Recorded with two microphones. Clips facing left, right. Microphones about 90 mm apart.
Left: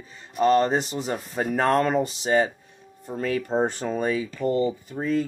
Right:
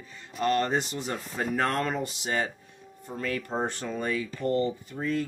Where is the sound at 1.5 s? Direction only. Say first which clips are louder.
Left 7 dB; 35° left (ahead or behind).